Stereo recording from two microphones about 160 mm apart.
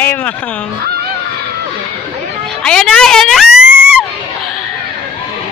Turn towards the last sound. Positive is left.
turn(degrees=-5)  # may be behind; listen again after turning